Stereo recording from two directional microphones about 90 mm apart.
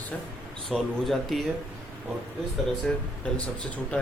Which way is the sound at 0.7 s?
Centre (ahead or behind).